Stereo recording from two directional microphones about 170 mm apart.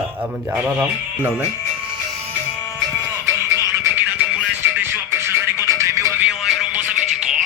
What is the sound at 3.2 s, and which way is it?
Music, 15° right (ahead or behind).